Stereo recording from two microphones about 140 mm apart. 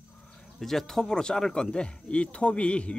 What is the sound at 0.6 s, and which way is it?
Speech, centre (ahead or behind).